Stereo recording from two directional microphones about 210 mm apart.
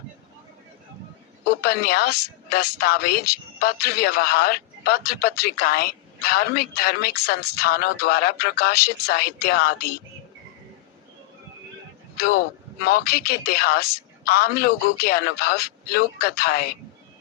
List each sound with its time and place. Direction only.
1.6 s a woman's voice: 45° left (ahead or behind)
12.8 s a woman's voice: 45° left (ahead or behind)